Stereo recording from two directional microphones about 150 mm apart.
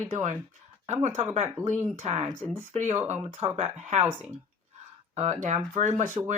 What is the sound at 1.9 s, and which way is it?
Speech, 45° right (ahead or behind).